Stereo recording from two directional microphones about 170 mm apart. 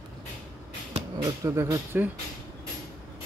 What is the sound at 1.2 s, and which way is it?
Speech, 15° right (ahead or behind).